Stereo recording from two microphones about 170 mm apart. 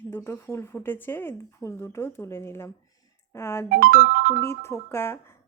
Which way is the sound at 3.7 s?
55° right (ahead or behind).